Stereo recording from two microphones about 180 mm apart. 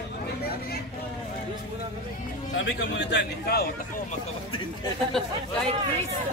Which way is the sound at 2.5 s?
75° left (ahead or behind).